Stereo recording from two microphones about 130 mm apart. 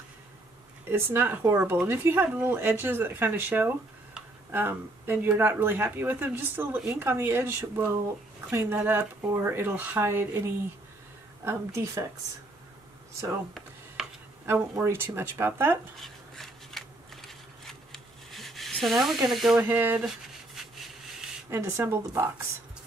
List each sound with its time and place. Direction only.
0.8 s a woman's voice: 20° right (ahead or behind)
14.0 s a sound: 5° right (ahead or behind)
14.4 s speech: 20° right (ahead or behind)
16.0 s a sound: centre (ahead or behind)
19.2 s speech: centre (ahead or behind)
19.7 s speech: 15° right (ahead or behind)
21.5 s a woman's voice: 20° right (ahead or behind)